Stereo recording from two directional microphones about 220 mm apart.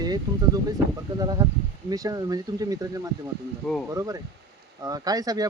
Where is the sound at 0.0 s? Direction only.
20° right (ahead or behind).